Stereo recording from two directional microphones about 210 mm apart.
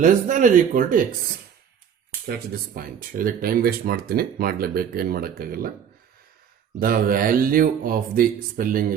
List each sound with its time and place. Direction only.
0.0 s speech: 35° right (ahead or behind)
2.7 s speech: 40° right (ahead or behind)
6.7 s speech: 45° right (ahead or behind)